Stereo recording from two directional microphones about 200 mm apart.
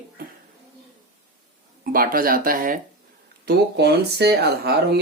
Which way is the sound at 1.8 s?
45° right (ahead or behind).